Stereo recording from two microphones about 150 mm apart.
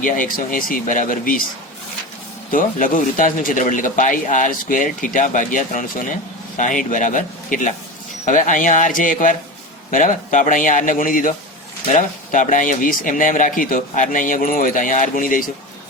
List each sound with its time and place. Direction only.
0.0 s speech: 65° left (ahead or behind)
2.5 s speech: 65° left (ahead or behind)